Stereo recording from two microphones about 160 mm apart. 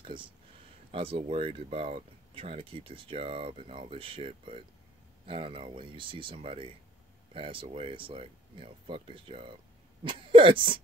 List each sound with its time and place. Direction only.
0.0 s speech: 30° right (ahead or behind)